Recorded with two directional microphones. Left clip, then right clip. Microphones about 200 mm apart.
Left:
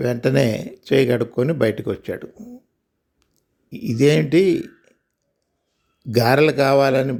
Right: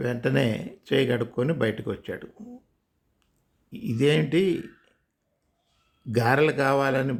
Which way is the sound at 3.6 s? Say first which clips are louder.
Left 6 dB; 20° left (ahead or behind).